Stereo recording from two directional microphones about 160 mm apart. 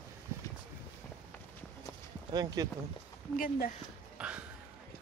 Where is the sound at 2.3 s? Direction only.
25° right (ahead or behind).